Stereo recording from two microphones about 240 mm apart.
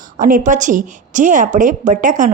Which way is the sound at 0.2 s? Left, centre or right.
Right.